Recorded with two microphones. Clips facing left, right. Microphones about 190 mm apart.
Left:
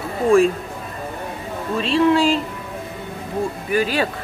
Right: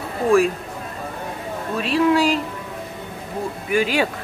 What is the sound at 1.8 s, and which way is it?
Speech, 10° right (ahead or behind).